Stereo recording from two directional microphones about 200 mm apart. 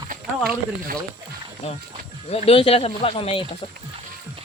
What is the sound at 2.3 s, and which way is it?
Speech, 30° left (ahead or behind).